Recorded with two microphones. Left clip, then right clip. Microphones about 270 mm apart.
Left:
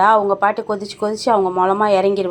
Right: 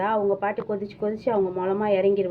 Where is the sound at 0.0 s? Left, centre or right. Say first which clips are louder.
Left 10 dB; centre.